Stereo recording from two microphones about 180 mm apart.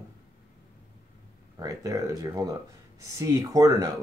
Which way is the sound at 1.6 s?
20° right (ahead or behind).